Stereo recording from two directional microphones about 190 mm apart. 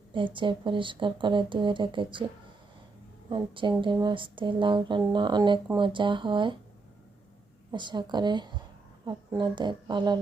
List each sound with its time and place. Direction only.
0.3 s speech: 25° right (ahead or behind)
3.2 s speech: 25° right (ahead or behind)
7.7 s speech: 25° right (ahead or behind)